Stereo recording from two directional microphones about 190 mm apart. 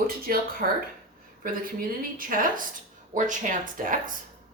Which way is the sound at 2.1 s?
45° right (ahead or behind).